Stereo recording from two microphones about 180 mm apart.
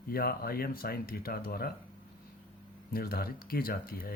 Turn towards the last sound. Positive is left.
turn(degrees=55)  # may be behind; listen again after turning